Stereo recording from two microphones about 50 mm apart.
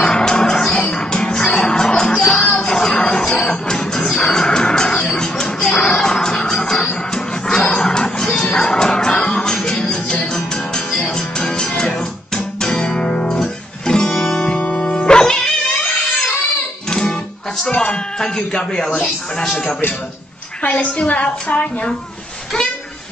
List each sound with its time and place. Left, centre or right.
0.0 s music: centre
13.3 s guitar: centre
14.6 s music: left
16.9 s music: centre
17.6 s a sound: left
19.0 s speech: centre
20.7 s a woman's voice: left